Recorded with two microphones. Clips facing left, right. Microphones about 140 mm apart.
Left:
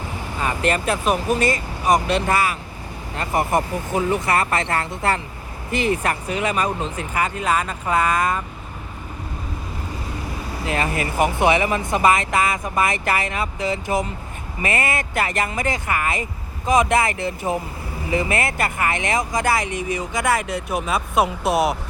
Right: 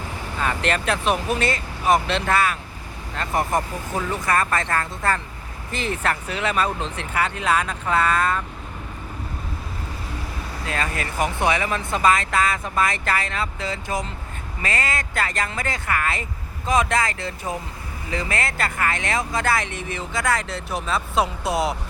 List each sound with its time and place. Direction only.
0.3 s speech: 10° left (ahead or behind)
3.2 s speech: 10° left (ahead or behind)
10.7 s speech: 20° left (ahead or behind)